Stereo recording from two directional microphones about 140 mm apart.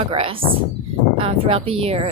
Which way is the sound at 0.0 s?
40° right (ahead or behind).